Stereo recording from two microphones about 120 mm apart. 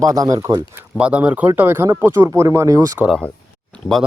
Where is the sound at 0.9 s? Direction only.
10° right (ahead or behind); by 3.0 s 30° right (ahead or behind).